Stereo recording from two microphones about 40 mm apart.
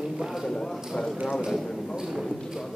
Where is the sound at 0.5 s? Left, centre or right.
Centre.